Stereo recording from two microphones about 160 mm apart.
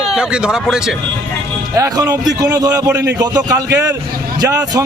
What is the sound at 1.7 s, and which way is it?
Speech, 20° right (ahead or behind).